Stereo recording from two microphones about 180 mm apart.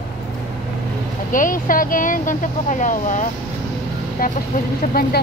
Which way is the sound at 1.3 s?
50° left (ahead or behind).